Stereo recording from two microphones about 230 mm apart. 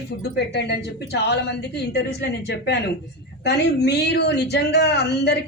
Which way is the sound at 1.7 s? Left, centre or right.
Left.